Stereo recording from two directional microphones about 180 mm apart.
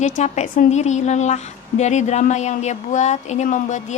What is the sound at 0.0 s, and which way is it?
A woman's voice, 40° left (ahead or behind).